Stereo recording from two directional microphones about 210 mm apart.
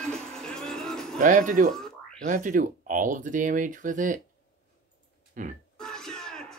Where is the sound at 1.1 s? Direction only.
35° right (ahead or behind).